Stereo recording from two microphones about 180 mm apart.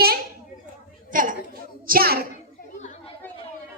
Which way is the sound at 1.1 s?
45° right (ahead or behind).